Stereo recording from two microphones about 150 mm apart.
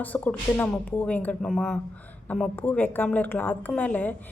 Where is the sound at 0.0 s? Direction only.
10° left (ahead or behind).